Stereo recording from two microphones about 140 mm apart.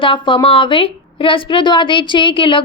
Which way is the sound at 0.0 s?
35° left (ahead or behind).